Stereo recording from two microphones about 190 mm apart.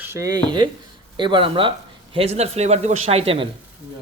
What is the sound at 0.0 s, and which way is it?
A man's voice, 15° right (ahead or behind).